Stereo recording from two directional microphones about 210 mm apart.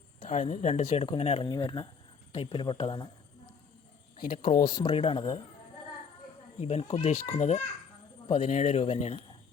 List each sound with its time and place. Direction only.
0.3 s speech: 35° left (ahead or behind)
4.6 s speech: 20° left (ahead or behind)
6.6 s a man's voice: 30° left (ahead or behind)